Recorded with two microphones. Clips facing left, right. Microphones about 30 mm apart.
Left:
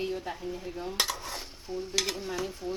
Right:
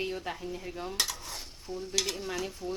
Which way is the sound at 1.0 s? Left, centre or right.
Centre.